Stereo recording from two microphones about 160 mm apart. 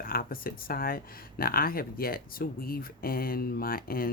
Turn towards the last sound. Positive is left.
turn(degrees=65)  # may be behind; listen again after turning